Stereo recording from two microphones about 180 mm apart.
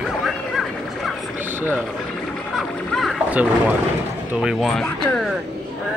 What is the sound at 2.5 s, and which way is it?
Speech, centre (ahead or behind).